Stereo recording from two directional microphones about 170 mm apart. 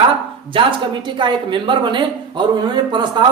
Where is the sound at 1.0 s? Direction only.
30° right (ahead or behind).